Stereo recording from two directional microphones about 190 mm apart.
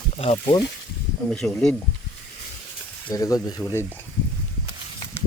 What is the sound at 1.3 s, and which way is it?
Speech, 5° left (ahead or behind).